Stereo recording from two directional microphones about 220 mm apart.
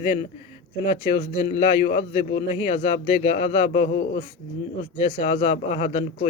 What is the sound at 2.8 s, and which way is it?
A man's voice, 30° left (ahead or behind).